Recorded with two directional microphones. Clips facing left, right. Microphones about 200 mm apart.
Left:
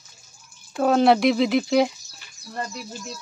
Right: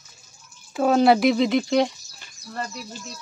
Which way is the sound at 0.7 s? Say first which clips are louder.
Even; centre (ahead or behind).